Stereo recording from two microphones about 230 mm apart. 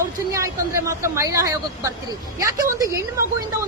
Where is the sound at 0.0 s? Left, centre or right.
Centre.